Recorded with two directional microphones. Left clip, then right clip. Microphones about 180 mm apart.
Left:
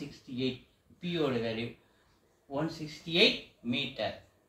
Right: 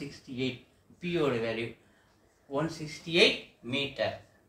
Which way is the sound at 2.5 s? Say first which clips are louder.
Right 2 dB; 15° right (ahead or behind).